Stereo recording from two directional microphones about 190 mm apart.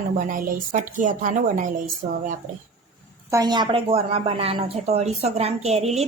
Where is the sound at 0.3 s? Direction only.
45° right (ahead or behind).